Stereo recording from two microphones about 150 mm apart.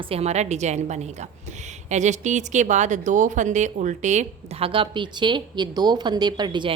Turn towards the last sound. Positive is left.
turn(degrees=-30)  # may be behind; listen again after turning